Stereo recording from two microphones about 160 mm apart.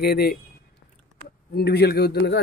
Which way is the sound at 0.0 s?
75° left (ahead or behind).